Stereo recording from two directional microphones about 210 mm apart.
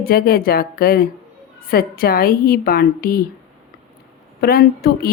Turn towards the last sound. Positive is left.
turn(degrees=45)  # may be behind; listen again after turning